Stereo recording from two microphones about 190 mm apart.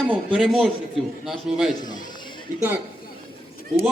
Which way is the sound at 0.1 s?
5° right (ahead or behind).